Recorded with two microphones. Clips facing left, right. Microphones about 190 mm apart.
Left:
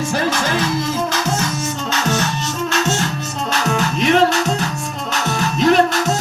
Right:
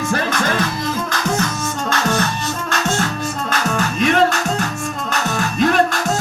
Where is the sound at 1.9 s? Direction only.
50° right (ahead or behind).